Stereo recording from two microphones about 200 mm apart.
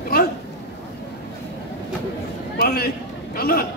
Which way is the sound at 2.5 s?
50° left (ahead or behind).